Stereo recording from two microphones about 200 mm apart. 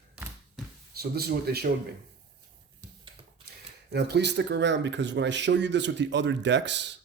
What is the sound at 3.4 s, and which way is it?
Speech, 55° right (ahead or behind).